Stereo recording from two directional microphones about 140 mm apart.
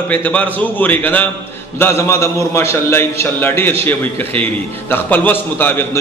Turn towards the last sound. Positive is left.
turn(degrees=15)  # may be behind; listen again after turning